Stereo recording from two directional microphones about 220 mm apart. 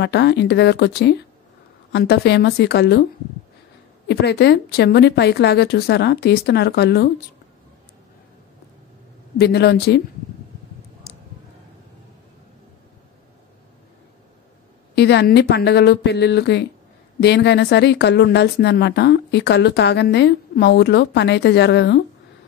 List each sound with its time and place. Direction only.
0.0 s a woman's voice: 50° left (ahead or behind)
4.1 s a woman's voice: 50° left (ahead or behind)
9.4 s a woman's voice: 50° left (ahead or behind)
15.0 s a woman's voice: 50° left (ahead or behind)